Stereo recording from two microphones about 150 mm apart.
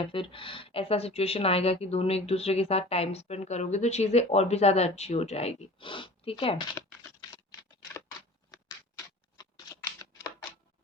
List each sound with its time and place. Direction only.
0.0 s speech: 35° left (ahead or behind)
6.7 s a sound: 20° left (ahead or behind)
8.4 s patter: 25° left (ahead or behind)